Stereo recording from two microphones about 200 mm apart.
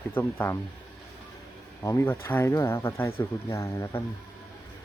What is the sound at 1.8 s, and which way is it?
Speech, 15° left (ahead or behind).